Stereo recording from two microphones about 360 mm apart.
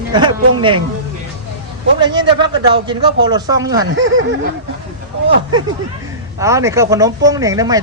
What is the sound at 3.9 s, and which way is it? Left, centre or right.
Speech, right.